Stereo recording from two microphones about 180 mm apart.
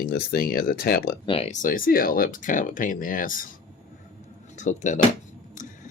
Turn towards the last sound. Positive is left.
turn(degrees=40)  # may be behind; listen again after turning